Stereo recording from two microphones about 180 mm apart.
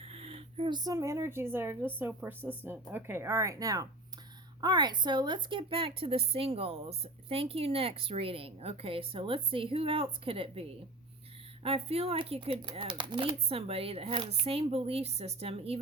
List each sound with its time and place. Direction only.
0.0 s a woman's voice: 35° right (ahead or behind)